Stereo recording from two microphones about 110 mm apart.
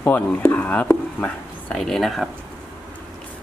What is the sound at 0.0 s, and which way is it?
Speech, 15° left (ahead or behind).